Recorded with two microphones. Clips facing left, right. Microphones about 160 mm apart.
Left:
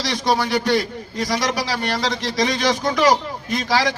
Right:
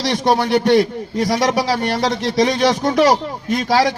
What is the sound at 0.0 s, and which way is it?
A man's voice, 60° right (ahead or behind).